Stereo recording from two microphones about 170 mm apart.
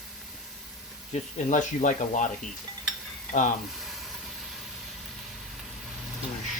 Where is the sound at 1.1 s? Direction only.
45° left (ahead or behind).